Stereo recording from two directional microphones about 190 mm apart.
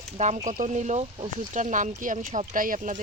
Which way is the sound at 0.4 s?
40° right (ahead or behind).